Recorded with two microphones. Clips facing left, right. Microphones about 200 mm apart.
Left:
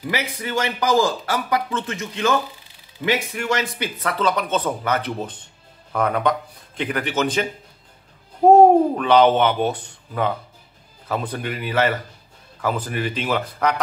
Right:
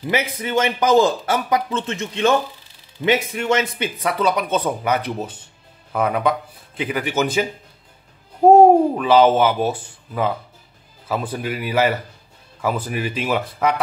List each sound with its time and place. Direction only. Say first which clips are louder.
0.1 s speech: right 5 dB; 20° right (ahead or behind)
8.5 s speech: right 1 dB; 5° right (ahead or behind)